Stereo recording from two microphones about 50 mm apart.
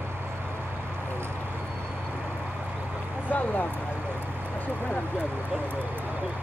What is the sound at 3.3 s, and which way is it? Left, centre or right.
Speech, left.